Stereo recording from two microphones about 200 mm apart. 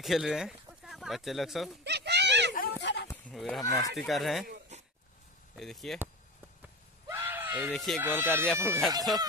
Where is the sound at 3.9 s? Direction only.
Centre (ahead or behind).